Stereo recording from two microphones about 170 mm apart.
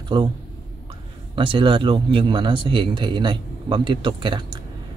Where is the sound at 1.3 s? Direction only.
30° right (ahead or behind).